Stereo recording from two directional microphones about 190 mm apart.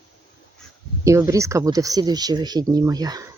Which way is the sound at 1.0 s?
15° right (ahead or behind).